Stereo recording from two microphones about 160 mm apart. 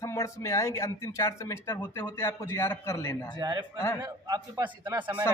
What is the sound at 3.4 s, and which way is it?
A man's voice, 25° right (ahead or behind).